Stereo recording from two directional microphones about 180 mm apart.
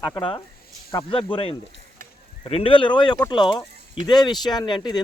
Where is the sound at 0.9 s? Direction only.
30° left (ahead or behind).